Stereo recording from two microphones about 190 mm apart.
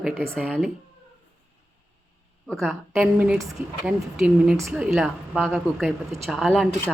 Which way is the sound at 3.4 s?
15° right (ahead or behind).